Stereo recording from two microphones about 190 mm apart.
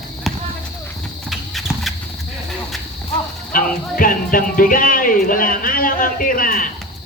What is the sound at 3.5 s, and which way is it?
Speech, 50° left (ahead or behind).